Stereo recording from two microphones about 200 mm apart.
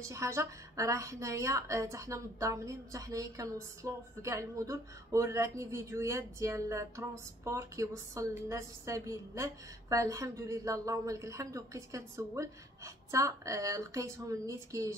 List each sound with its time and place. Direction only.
0.0 s a woman's voice: 15° right (ahead or behind)